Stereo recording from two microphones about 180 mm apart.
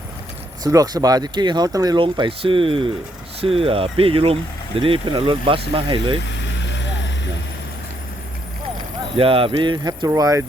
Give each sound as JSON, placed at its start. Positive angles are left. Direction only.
{"t": 0.6, "sound": "speech", "side_deg": -20}
{"t": 6.7, "sound": "vehicle", "side_deg": 85}
{"t": 9.1, "sound": "speech", "side_deg": -30}